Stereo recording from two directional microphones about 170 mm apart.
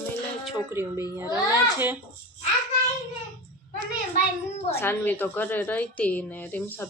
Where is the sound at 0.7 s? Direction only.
15° right (ahead or behind).